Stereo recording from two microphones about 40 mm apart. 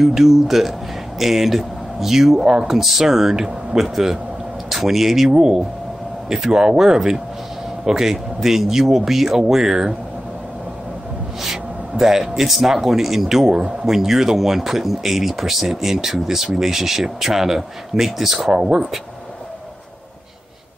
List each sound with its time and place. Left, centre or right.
0.0 s speech: centre
11.4 s speech: centre
18.5 s speech: centre